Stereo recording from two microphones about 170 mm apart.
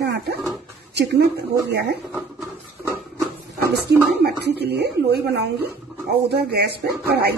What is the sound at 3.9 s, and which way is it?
Speech, 80° right.